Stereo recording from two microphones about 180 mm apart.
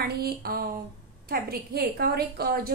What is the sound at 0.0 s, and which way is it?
A woman's voice, 55° right (ahead or behind).